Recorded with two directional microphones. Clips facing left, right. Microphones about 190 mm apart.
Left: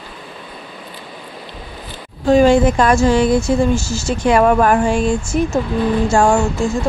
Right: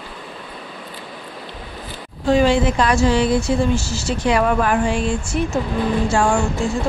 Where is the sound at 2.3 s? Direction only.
45° left (ahead or behind).